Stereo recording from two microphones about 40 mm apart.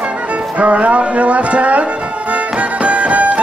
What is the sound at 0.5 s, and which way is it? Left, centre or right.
Music, right.